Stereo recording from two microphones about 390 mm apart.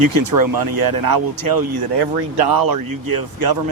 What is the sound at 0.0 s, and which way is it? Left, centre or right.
Speech, right.